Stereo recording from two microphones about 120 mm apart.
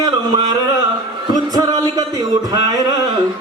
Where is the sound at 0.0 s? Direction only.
35° right (ahead or behind).